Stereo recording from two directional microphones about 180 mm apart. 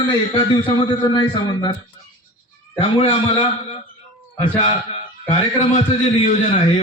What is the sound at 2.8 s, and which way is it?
Speech, 35° left (ahead or behind).